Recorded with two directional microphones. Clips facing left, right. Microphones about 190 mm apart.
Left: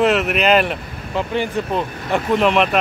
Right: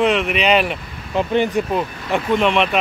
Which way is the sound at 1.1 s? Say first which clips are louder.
Right 3 dB; 20° right (ahead or behind).